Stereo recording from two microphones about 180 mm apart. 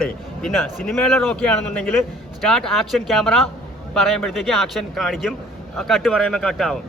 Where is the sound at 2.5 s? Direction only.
Centre (ahead or behind).